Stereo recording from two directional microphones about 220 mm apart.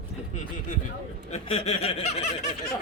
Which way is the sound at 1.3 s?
30° left (ahead or behind).